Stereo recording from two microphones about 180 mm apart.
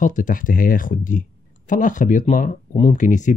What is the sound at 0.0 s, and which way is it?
Speech, 45° left (ahead or behind).